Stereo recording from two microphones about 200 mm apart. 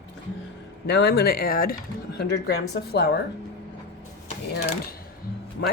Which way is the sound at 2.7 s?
55° left (ahead or behind).